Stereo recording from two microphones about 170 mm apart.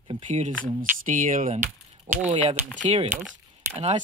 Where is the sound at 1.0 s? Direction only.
50° right (ahead or behind).